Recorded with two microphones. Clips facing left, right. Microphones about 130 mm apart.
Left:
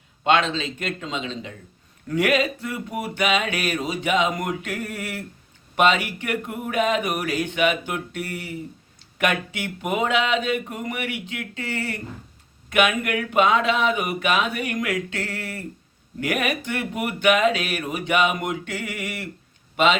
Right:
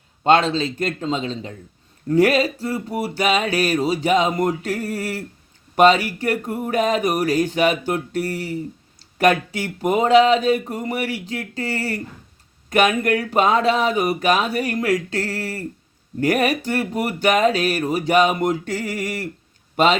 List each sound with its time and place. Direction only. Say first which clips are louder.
0.3 s music: right 4 dB; 35° right (ahead or behind)
19.7 s speech: right 3 dB; 40° right (ahead or behind)